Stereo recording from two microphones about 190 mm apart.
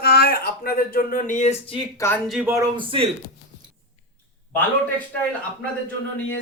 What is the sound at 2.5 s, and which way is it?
Speech, 20° right (ahead or behind).